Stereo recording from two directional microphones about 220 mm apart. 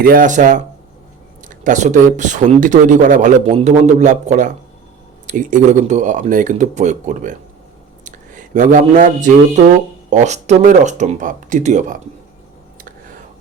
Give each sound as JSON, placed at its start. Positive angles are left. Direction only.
{"t": 0.0, "sound": "speech", "side_deg": -40}
{"t": 8.0, "sound": "a sound", "side_deg": -35}
{"t": 10.1, "sound": "speech", "side_deg": -30}